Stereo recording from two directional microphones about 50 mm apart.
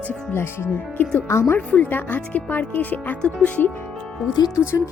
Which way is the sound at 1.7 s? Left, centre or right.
Left.